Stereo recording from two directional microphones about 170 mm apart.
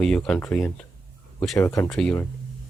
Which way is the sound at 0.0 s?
5° left (ahead or behind).